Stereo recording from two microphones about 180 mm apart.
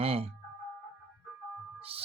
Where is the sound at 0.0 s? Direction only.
35° right (ahead or behind).